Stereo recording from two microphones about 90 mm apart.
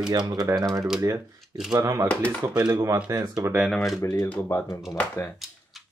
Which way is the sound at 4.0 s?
35° left (ahead or behind).